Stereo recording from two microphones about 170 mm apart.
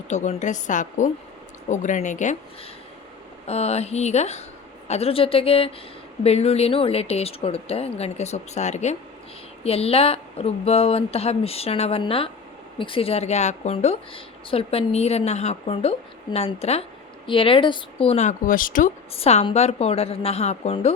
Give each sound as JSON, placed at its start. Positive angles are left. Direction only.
{"t": 0.1, "sound": "a woman's voice", "side_deg": 45}
{"t": 3.4, "sound": "a woman's voice", "side_deg": 35}
{"t": 19.1, "sound": "a woman's voice", "side_deg": 35}